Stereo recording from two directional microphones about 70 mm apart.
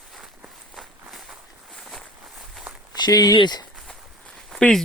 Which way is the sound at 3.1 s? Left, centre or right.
Left.